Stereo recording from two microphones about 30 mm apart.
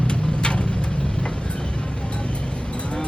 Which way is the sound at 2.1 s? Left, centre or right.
Left.